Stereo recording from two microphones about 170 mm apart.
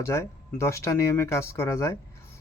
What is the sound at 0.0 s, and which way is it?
Speech, 15° left (ahead or behind).